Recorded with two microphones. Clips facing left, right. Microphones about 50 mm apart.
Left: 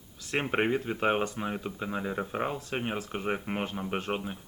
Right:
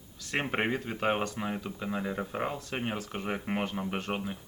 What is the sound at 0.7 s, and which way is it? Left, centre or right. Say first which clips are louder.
Speech: left 2 dB; centre.